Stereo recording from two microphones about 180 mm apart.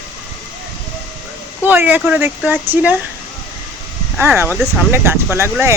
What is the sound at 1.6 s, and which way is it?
Speech, 10° right (ahead or behind).